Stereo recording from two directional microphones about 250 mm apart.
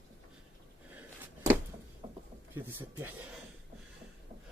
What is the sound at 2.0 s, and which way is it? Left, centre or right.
Mechanisms, right.